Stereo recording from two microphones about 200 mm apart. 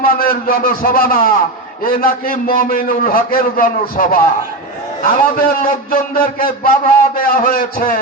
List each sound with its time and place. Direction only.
0.0 s a man's voice: 45° left (ahead or behind)